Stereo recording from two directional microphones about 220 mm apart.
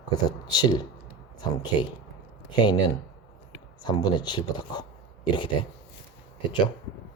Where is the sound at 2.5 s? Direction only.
20° left (ahead or behind).